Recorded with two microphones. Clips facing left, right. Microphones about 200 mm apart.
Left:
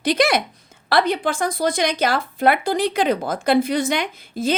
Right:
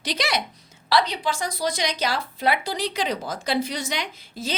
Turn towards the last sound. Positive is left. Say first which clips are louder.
# left 9 dB
turn(degrees=55)  # may be behind; listen again after turning